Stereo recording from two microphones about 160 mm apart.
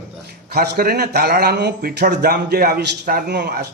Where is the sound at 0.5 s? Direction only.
75° right (ahead or behind).